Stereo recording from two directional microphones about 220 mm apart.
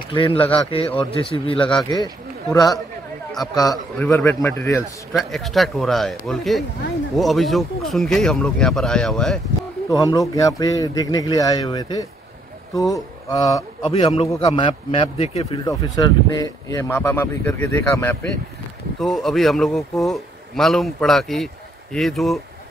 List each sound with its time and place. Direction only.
0.1 s a man's voice: 20° left (ahead or behind)
3.5 s a man's voice: 15° left (ahead or behind)
5.1 s a man's voice: centre (ahead or behind)
9.8 s a man's voice: 15° left (ahead or behind)
18.9 s a man's voice: centre (ahead or behind)